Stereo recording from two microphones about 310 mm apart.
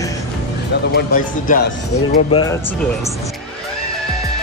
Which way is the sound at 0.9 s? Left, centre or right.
Left.